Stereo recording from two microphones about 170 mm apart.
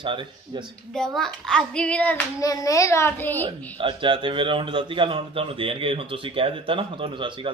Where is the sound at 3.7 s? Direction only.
30° right (ahead or behind).